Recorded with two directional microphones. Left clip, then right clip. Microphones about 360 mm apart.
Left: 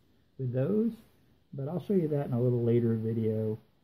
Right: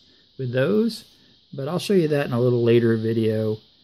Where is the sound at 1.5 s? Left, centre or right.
Right.